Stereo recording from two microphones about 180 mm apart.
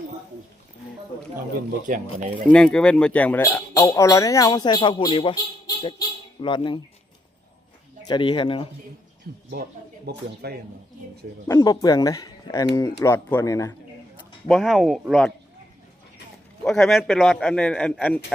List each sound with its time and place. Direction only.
1.9 s speech: 50° right (ahead or behind)
2.5 s speech: 5° left (ahead or behind)
3.4 s speech: 20° left (ahead or behind)
8.0 s speech: 25° left (ahead or behind)
9.3 s speech: 55° right (ahead or behind)
11.4 s speech: 20° left (ahead or behind)
14.4 s speech: centre (ahead or behind)
16.6 s speech: centre (ahead or behind)